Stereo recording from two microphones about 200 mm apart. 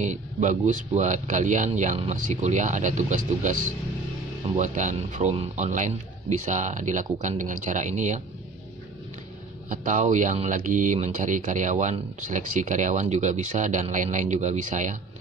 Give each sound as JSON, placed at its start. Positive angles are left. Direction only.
{"t": 0.0, "sound": "speech", "side_deg": -40}
{"t": 4.6, "sound": "speech", "side_deg": -40}
{"t": 9.7, "sound": "speech", "side_deg": -40}